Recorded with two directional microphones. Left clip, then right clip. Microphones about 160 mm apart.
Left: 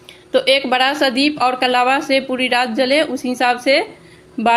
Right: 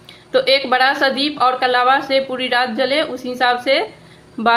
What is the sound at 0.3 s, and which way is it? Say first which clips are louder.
A woman's voice: even; 35° left (ahead or behind).